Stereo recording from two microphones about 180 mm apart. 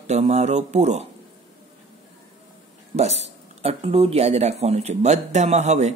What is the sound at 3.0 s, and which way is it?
Speech, 35° right (ahead or behind).